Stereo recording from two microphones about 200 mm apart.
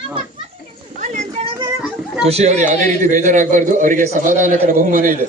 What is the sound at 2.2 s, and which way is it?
A man's voice, 30° right (ahead or behind).